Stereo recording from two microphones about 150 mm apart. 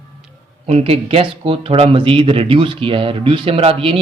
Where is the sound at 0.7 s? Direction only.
40° right (ahead or behind).